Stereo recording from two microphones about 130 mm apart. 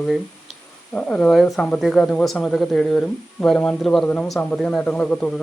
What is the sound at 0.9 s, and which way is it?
A man's voice, 10° left (ahead or behind).